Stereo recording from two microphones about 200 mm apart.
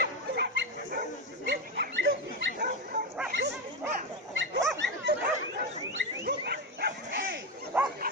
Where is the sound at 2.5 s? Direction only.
45° right (ahead or behind).